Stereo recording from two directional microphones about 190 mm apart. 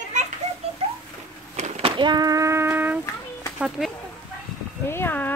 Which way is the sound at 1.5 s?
35° right (ahead or behind).